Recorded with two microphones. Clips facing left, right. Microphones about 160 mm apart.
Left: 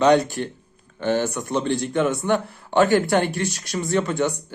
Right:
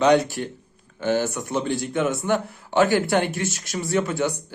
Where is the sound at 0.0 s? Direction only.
15° right (ahead or behind).